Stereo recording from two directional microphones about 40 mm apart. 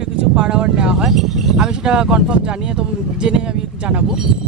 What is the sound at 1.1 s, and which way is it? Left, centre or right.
Speech, centre.